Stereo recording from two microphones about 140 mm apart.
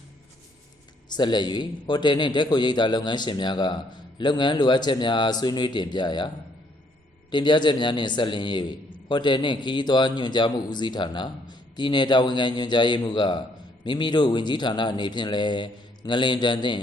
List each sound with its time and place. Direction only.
1.1 s a man's voice: 30° left (ahead or behind)